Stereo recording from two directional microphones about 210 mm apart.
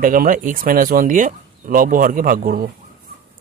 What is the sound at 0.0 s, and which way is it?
Speech, 40° right (ahead or behind).